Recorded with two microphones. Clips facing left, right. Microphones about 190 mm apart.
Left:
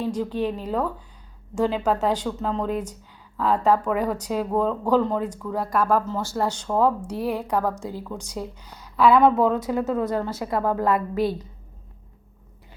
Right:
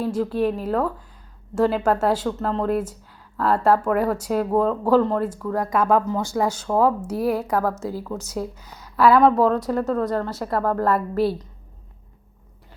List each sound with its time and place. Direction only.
0.0 s speech: 5° right (ahead or behind)
8.6 s a sound: 10° left (ahead or behind)
9.0 s speech: 5° right (ahead or behind)